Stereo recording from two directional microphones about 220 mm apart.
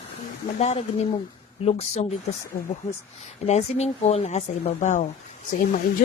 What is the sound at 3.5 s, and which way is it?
Speech, 30° left (ahead or behind).